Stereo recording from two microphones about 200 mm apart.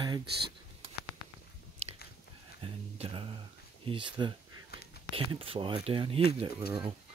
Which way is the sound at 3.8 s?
25° right (ahead or behind).